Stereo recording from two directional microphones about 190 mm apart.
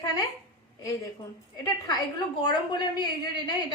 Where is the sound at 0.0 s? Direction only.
20° left (ahead or behind).